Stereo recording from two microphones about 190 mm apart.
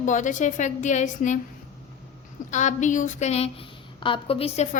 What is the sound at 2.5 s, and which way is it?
Female singing, 40° left (ahead or behind).